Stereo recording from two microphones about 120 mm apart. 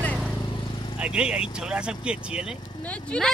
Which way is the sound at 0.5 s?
40° left (ahead or behind).